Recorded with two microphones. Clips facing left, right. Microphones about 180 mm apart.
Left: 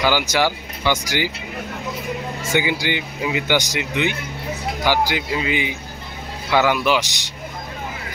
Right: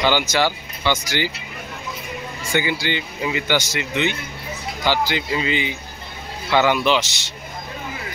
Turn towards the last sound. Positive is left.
turn(degrees=15)  # may be behind; listen again after turning